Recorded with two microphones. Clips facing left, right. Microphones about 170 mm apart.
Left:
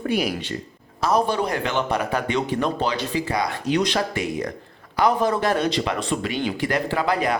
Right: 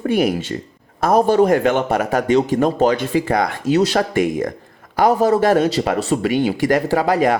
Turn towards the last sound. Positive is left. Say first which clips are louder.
# right 6 dB
turn(degrees=-45)  # may be behind; listen again after turning